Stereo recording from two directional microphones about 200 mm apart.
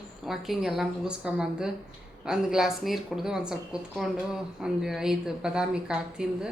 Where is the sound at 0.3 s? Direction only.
Centre (ahead or behind).